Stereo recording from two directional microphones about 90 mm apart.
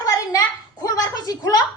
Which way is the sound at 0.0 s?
40° left (ahead or behind).